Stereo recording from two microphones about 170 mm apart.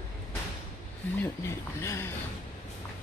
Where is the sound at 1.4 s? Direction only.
15° left (ahead or behind).